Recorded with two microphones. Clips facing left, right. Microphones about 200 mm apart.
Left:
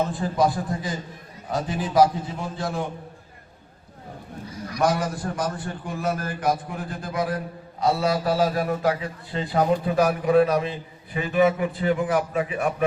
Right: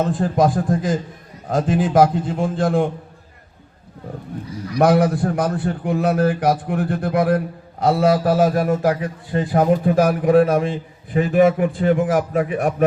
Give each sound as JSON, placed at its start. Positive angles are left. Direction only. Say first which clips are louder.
{"t": 0.1, "sound": "a man's voice", "louder": "right 5 dB", "side_deg": -45}
{"t": 1.9, "sound": "a man's voice", "louder": "right 1 dB", "side_deg": -50}
{"t": 4.8, "sound": "a man's voice", "louder": "right 8 dB", "side_deg": -60}